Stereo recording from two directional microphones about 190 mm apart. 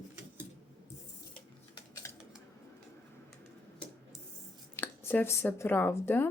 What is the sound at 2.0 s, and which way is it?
Scissors, 15° left (ahead or behind).